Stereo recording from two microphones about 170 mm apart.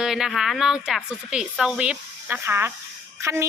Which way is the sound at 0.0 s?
Centre (ahead or behind).